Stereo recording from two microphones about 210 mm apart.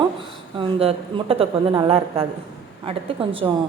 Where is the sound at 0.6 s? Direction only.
25° right (ahead or behind).